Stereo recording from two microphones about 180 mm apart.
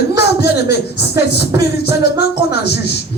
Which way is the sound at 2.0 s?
65° left (ahead or behind).